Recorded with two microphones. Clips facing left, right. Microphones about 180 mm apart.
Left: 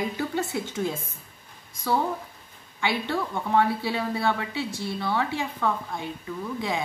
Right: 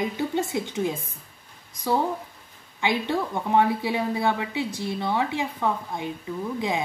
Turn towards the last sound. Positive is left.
turn(degrees=-20)  # may be behind; listen again after turning